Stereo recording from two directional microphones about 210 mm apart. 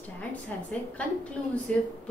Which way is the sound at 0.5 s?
5° left (ahead or behind).